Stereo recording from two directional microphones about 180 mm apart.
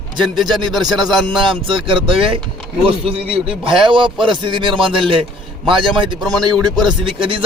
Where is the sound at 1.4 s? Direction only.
30° right (ahead or behind).